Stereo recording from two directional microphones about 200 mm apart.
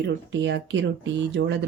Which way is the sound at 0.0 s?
60° right (ahead or behind).